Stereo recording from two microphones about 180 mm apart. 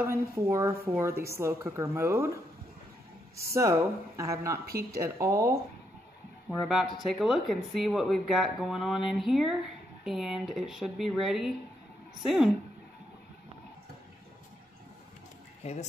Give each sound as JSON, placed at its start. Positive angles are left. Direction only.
{"t": 0.1, "sound": "a woman's voice", "side_deg": -15}
{"t": 4.6, "sound": "speech", "side_deg": -55}
{"t": 5.2, "sound": "a woman's voice", "side_deg": -15}
{"t": 6.5, "sound": "speech", "side_deg": 0}